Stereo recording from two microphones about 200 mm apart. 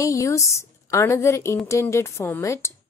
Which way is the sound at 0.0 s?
15° left (ahead or behind).